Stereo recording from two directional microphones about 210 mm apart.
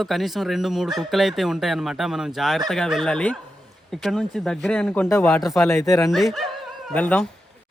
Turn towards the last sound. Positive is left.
turn(degrees=10)  # may be behind; listen again after turning